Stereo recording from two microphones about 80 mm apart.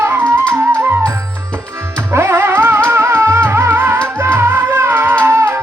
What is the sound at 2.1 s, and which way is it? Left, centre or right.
Music, right.